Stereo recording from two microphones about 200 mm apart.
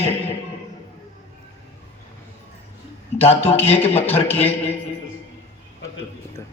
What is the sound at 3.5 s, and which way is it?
A man's voice, 30° left (ahead or behind).